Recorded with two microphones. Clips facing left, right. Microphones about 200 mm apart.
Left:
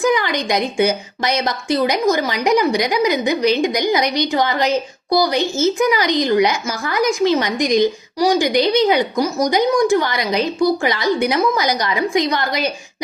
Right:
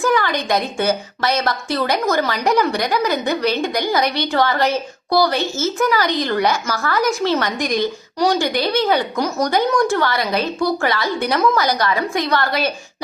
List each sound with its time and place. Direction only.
0.0 s a woman's voice: 15° left (ahead or behind)